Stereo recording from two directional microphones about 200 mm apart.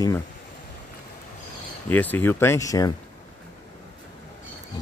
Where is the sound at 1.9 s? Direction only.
10° left (ahead or behind).